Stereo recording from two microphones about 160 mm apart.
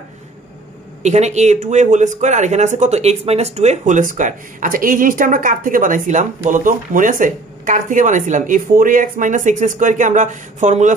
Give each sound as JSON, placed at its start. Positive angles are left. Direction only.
{"t": 1.0, "sound": "speech", "side_deg": -45}